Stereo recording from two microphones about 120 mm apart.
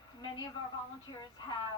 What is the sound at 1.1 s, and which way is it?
Speech, 35° left (ahead or behind).